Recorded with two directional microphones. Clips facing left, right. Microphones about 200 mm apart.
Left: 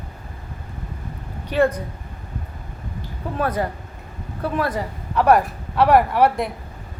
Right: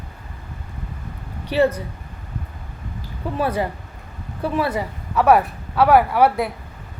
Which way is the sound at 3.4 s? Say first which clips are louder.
Right 1 dB; 10° right (ahead or behind).